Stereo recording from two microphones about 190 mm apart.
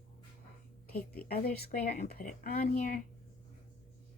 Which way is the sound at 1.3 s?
50° left (ahead or behind).